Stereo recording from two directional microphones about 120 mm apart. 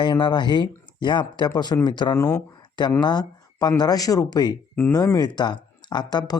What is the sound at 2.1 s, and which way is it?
Speech, 25° left (ahead or behind).